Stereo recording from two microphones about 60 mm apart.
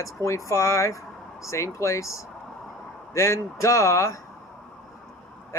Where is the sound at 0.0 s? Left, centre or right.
Left.